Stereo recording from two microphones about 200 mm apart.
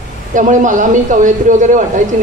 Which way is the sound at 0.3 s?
40° right (ahead or behind).